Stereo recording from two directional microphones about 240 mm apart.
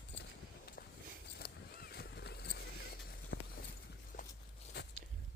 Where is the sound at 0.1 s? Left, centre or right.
Left.